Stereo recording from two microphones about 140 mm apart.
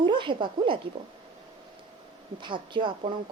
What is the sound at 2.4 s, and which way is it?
Speech, 35° right (ahead or behind).